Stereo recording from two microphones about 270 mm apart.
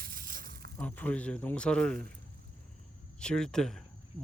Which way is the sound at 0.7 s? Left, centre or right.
Centre.